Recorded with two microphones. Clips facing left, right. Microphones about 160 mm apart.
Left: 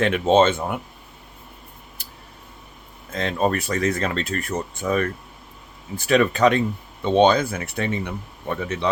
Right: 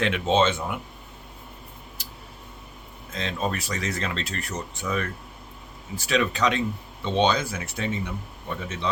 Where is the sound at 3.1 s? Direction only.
55° left (ahead or behind).